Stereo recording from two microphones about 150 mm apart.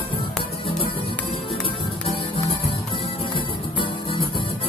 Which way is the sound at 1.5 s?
40° left (ahead or behind).